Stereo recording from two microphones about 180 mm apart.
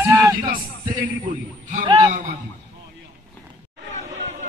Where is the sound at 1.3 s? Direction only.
45° right (ahead or behind).